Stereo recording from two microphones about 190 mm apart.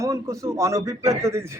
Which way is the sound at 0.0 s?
15° right (ahead or behind).